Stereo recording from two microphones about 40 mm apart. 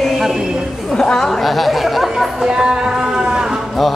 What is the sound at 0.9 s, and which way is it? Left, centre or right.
Chatter, centre.